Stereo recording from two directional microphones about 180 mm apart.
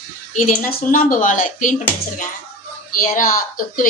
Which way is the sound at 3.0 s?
50° left (ahead or behind).